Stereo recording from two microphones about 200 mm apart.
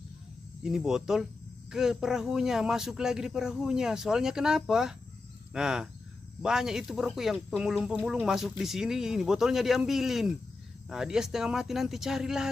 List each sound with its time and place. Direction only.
0.6 s speech: centre (ahead or behind)